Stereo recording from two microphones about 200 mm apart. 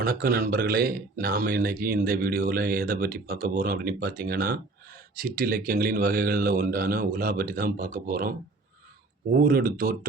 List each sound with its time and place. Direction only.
0.0 s speech: 45° right (ahead or behind)
9.3 s speech: 45° right (ahead or behind)